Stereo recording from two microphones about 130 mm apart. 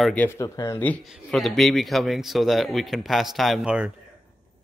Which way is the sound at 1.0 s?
Centre (ahead or behind).